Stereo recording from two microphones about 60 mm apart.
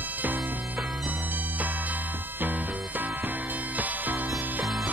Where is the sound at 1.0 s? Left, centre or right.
Right.